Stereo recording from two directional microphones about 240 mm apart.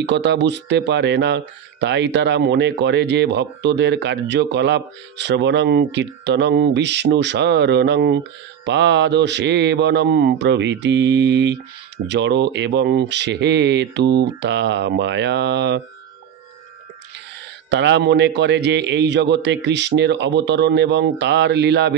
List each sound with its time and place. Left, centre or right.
0.0 s speech: right
17.6 s speech: right